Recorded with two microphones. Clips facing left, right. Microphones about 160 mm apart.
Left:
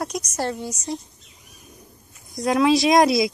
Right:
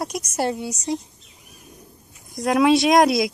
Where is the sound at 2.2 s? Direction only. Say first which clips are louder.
Right 1 dB; centre (ahead or behind).